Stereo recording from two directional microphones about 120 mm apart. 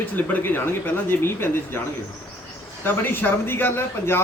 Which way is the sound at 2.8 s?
15° left (ahead or behind).